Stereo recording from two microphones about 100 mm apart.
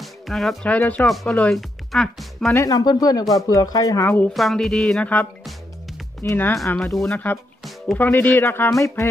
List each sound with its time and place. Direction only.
0.0 s music: centre (ahead or behind)
0.7 s speech: 15° left (ahead or behind)
1.0 s speech: centre (ahead or behind)
2.5 s speech: 35° left (ahead or behind)
4.0 s speech: 25° left (ahead or behind)
4.3 s speech: centre (ahead or behind)
5.0 s speech: 15° left (ahead or behind)
6.8 s speech: 5° left (ahead or behind)
7.1 s speech: 15° left (ahead or behind)
8.7 s speech: 30° left (ahead or behind)